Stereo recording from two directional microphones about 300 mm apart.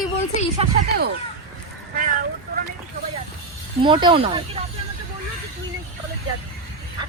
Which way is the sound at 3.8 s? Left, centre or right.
Centre.